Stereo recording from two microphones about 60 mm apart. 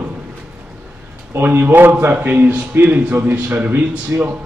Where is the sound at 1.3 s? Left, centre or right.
Right.